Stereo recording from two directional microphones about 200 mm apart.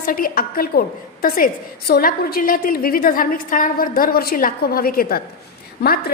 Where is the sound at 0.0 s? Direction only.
45° left (ahead or behind).